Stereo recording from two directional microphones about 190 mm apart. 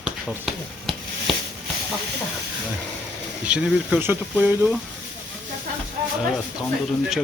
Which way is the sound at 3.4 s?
5° right (ahead or behind).